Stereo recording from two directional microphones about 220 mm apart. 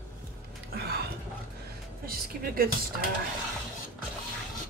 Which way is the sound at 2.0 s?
40° right (ahead or behind).